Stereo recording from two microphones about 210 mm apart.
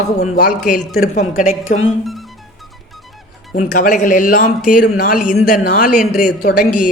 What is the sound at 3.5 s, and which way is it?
A man's voice, 40° left (ahead or behind).